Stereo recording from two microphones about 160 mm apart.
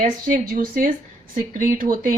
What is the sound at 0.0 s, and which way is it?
Speech, 65° right (ahead or behind).